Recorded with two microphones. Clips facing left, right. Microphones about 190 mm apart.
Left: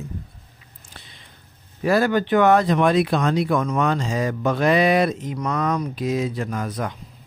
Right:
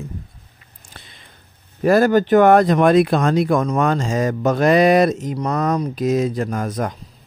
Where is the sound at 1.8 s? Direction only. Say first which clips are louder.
Right 5 dB; 45° right (ahead or behind).